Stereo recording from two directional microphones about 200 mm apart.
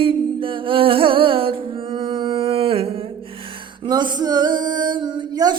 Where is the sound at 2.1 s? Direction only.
25° right (ahead or behind).